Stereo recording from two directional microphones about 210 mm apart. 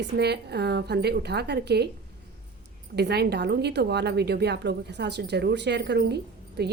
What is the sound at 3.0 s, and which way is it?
A woman's voice, 50° right (ahead or behind).